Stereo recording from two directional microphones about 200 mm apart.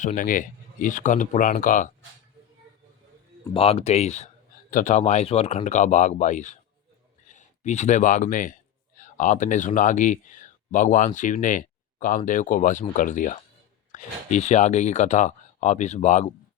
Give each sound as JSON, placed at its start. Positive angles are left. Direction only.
{"t": 0.0, "sound": "speech", "side_deg": 40}
{"t": 3.4, "sound": "speech", "side_deg": 25}